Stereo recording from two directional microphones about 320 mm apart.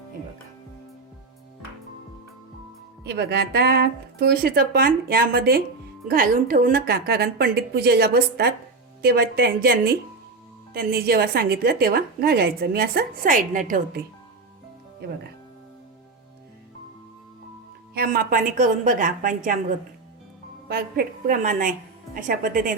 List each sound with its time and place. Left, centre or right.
3.0 s a woman's voice: right
17.9 s a woman's voice: right
20.7 s a woman's voice: right